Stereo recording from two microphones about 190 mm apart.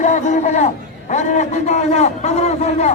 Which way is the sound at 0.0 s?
40° left (ahead or behind).